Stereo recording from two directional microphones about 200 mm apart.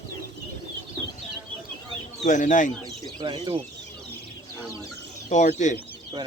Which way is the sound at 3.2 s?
25° right (ahead or behind).